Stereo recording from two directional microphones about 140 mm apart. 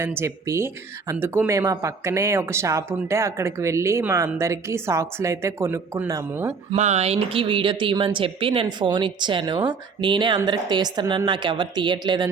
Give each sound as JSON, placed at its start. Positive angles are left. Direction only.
{"t": 0.0, "sound": "speech", "side_deg": -20}
{"t": 6.7, "sound": "speech", "side_deg": -50}